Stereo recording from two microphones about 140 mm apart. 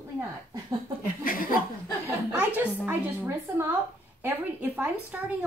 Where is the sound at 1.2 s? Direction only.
90° left.